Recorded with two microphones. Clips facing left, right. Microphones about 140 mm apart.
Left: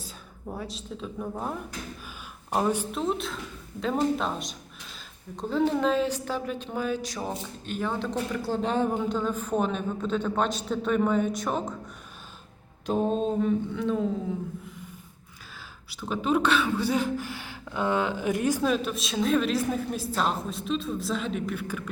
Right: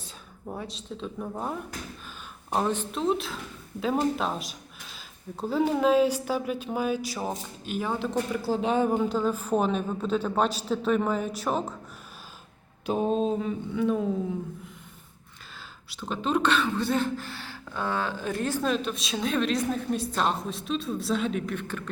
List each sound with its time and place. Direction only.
0.0 s speech: centre (ahead or behind)
2.5 s a woman's voice: 10° left (ahead or behind)
12.8 s a woman's voice: 5° right (ahead or behind)
15.9 s speech: 5° left (ahead or behind)
18.6 s a woman's voice: 5° left (ahead or behind)